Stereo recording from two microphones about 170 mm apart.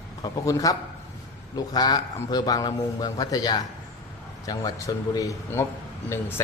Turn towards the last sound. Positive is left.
turn(degrees=15)  # may be behind; listen again after turning